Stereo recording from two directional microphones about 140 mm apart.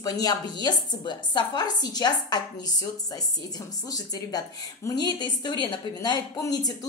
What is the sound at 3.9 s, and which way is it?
A woman's voice, 25° left (ahead or behind).